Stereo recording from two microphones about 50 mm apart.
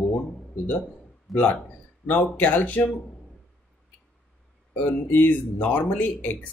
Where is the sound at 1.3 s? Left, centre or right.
Centre.